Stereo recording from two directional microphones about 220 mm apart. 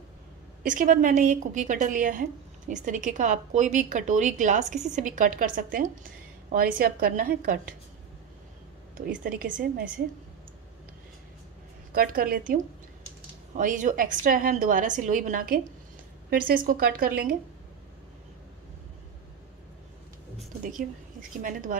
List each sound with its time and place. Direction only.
0.7 s a woman's voice: 35° right (ahead or behind)
9.4 s a woman's voice: 40° right (ahead or behind)
11.9 s a woman's voice: 40° right (ahead or behind)
13.6 s a woman's voice: 35° right (ahead or behind)
21.4 s a woman's voice: 35° right (ahead or behind)